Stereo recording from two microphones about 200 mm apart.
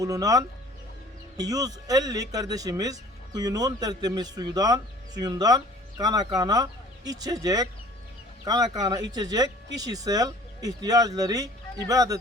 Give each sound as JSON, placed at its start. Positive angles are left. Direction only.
{"t": 0.0, "sound": "speech", "side_deg": -15}